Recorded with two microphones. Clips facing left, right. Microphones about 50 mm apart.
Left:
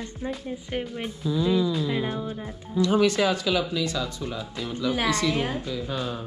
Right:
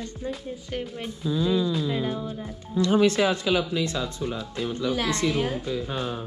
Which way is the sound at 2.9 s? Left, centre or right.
Right.